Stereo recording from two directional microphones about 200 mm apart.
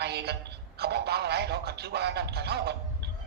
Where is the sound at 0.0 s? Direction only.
55° right (ahead or behind).